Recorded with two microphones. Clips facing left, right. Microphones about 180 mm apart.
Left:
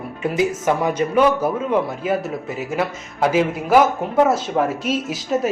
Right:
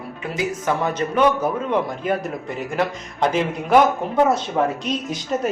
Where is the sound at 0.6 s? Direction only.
10° left (ahead or behind).